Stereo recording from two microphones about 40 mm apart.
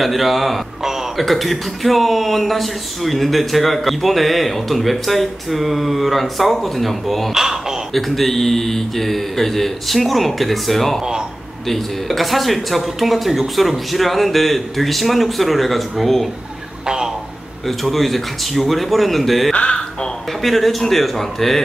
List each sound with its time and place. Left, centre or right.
0.0 s a man's voice: centre
16.8 s a sound: centre
17.6 s a man's voice: centre